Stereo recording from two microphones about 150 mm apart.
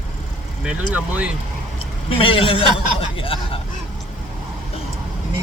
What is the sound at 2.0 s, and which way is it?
A man's voice, 35° left (ahead or behind).